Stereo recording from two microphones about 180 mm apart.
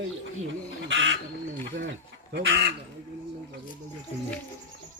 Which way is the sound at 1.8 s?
75° right (ahead or behind).